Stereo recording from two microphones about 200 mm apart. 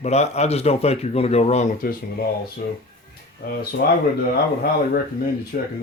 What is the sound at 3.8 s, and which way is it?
Speech, 50° left (ahead or behind).